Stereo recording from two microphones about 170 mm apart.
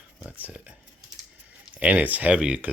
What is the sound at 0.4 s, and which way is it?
Typing, 10° right (ahead or behind).